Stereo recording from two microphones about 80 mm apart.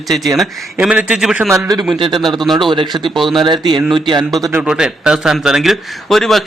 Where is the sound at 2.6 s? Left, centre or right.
Right.